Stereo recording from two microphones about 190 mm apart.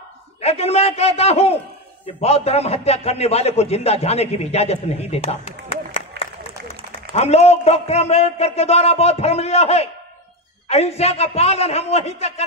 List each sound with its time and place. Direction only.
0.4 s a man's voice: 35° left (ahead or behind)
6.2 s a sound: 60° right (ahead or behind)
7.2 s a man's voice: 35° left (ahead or behind)